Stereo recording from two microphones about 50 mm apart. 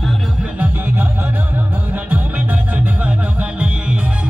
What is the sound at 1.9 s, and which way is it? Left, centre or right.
Music, right.